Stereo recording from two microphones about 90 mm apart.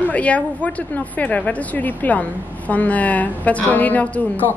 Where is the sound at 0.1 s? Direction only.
15° left (ahead or behind).